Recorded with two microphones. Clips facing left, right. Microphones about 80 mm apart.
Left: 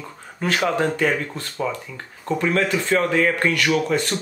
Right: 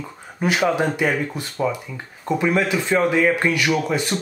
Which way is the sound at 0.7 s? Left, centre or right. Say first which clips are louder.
Left 1 dB; centre.